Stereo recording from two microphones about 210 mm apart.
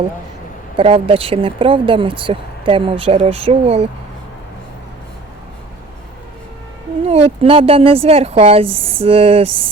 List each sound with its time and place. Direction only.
0.8 s speech: 25° right (ahead or behind)
7.0 s speech: 30° right (ahead or behind)